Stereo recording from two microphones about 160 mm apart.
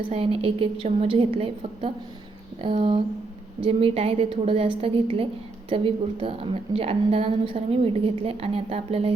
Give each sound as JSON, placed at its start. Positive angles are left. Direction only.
{"t": 0.1, "sound": "a woman's voice", "side_deg": -35}